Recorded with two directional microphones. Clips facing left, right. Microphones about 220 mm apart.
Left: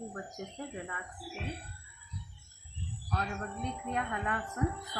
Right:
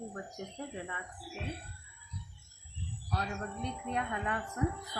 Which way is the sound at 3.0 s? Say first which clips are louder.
Left 1 dB; 15° right (ahead or behind).